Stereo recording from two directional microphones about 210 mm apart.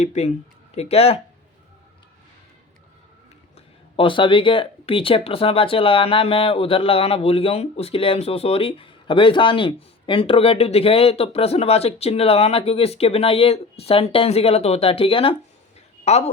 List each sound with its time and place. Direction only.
0.0 s speech: 35° left (ahead or behind)
3.9 s speech: 25° left (ahead or behind)